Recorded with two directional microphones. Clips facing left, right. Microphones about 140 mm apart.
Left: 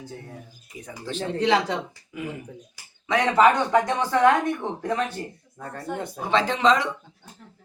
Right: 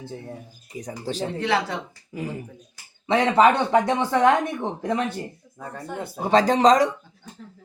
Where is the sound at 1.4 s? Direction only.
20° left (ahead or behind).